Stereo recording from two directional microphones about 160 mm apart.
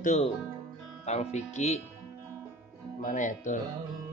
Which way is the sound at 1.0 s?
45° left (ahead or behind).